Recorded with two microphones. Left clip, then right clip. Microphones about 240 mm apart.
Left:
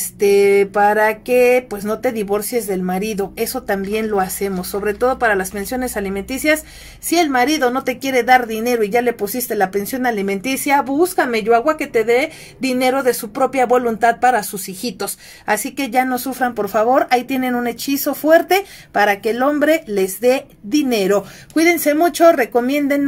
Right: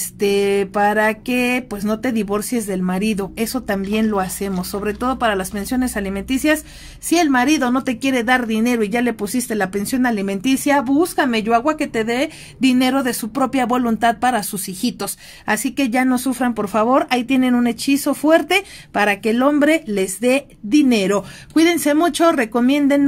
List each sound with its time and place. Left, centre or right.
0.2 s speech: right
18.9 s speech: right